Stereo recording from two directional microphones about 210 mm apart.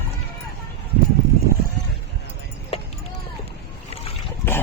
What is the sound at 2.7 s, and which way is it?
Clip-clop, 25° left (ahead or behind).